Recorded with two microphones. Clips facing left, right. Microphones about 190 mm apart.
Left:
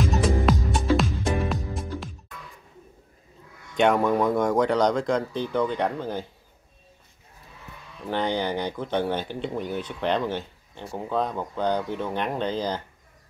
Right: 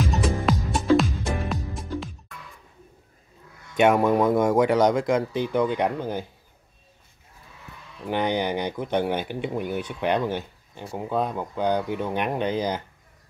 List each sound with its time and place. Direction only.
0.5 s music: centre (ahead or behind)
3.7 s speech: 5° right (ahead or behind)
8.1 s speech: 15° right (ahead or behind)